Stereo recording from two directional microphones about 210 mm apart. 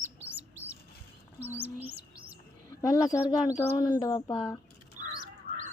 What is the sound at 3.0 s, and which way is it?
Speech, 15° left (ahead or behind).